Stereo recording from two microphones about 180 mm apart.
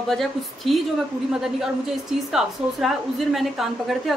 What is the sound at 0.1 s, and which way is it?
A woman's voice, centre (ahead or behind).